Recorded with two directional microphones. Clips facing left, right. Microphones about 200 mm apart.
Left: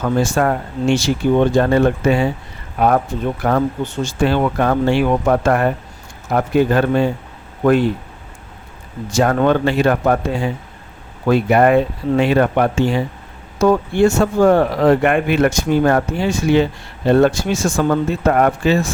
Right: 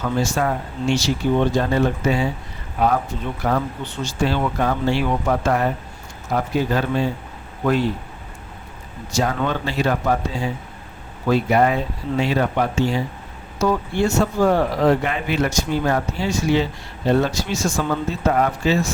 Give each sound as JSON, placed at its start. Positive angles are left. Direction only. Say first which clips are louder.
{"t": 0.0, "sound": "speech", "louder": "left 5 dB", "side_deg": 55}
{"t": 3.4, "sound": "speech", "louder": "left 4 dB", "side_deg": 50}
{"t": 9.1, "sound": "speech", "louder": "left 7 dB", "side_deg": 55}